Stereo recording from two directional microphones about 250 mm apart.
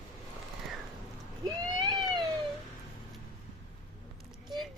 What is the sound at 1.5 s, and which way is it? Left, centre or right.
Boat, centre.